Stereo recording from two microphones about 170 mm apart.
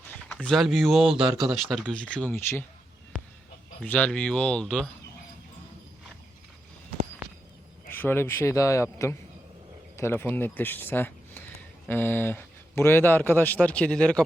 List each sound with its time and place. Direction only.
0.1 s speech: 5° left (ahead or behind)
1.2 s speech: 25° right (ahead or behind)
1.5 s speech: centre (ahead or behind)
3.8 s speech: 10° left (ahead or behind)
7.9 s speech: 15° left (ahead or behind)